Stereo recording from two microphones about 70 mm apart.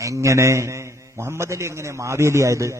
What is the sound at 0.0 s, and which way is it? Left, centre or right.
A man's voice, right.